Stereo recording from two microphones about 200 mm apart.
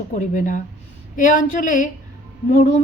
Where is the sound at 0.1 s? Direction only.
40° left (ahead or behind).